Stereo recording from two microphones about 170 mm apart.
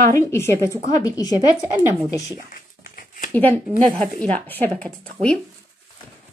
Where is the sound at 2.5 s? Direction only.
55° left (ahead or behind).